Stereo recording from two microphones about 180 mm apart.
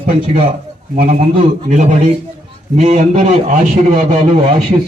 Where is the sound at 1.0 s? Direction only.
50° right (ahead or behind).